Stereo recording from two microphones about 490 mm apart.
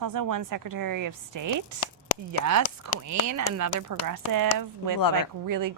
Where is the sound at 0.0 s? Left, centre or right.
Right.